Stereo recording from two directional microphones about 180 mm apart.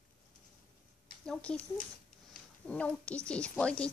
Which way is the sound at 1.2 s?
5° left (ahead or behind).